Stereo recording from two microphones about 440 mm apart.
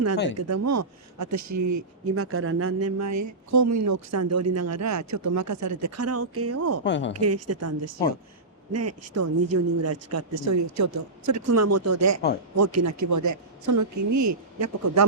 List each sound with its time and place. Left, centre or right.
0.3 s speech: right
6.8 s a woman's voice: left
7.1 s speech: right